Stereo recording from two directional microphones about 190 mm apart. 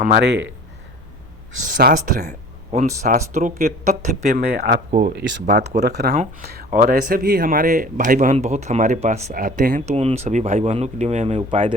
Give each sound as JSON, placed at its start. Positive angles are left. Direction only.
{"t": 0.0, "sound": "speech", "side_deg": -60}
{"t": 1.6, "sound": "speech", "side_deg": -50}
{"t": 2.7, "sound": "speech", "side_deg": -40}
{"t": 5.1, "sound": "speech", "side_deg": -65}